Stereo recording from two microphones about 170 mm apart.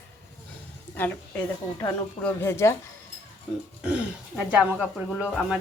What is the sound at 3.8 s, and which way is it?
Speech, 5° right (ahead or behind).